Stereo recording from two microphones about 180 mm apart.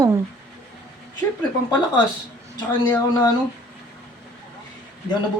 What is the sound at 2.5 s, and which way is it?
Speech, 25° left (ahead or behind).